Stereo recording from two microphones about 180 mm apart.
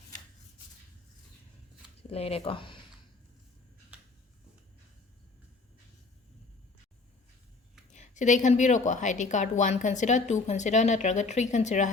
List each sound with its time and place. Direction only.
2.0 s a woman's voice: 35° left (ahead or behind)
7.9 s a woman's voice: 40° left (ahead or behind)